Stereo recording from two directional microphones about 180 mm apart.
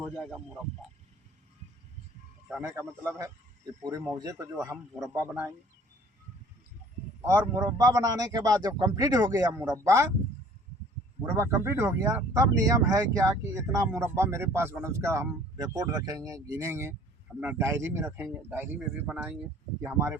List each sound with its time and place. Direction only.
0.0 s speech: 5° left (ahead or behind)
2.6 s a man's voice: 15° right (ahead or behind)
7.3 s a man's voice: 15° right (ahead or behind)
11.3 s speech: 15° right (ahead or behind)